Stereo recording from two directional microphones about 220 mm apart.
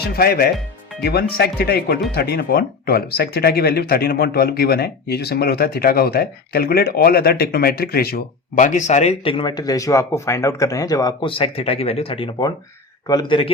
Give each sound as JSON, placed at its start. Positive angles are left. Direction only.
{"t": 0.0, "sound": "speech", "side_deg": 45}